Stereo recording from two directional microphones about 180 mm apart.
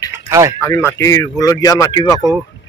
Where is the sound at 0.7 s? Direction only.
15° left (ahead or behind).